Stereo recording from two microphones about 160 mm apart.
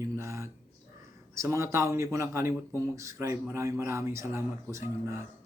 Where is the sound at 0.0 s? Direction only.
20° right (ahead or behind).